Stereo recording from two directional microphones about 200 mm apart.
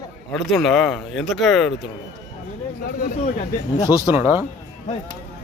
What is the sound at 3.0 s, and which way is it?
Speech, 40° left (ahead or behind).